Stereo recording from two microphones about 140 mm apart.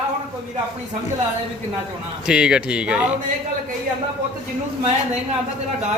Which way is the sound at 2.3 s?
5° right (ahead or behind).